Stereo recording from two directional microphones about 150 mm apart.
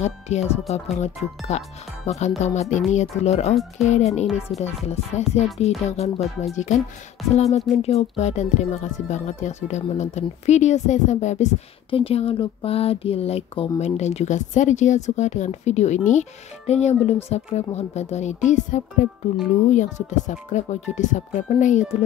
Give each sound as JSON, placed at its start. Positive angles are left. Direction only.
{"t": 0.0, "sound": "speech", "side_deg": 50}
{"t": 11.9, "sound": "speech", "side_deg": 40}